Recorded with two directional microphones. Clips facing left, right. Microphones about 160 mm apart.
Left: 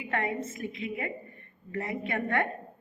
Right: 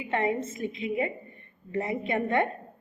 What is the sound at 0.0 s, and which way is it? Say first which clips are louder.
A woman's voice: right 4 dB; 25° right (ahead or behind).